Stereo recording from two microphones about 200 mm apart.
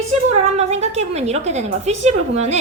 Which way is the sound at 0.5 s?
35° right (ahead or behind).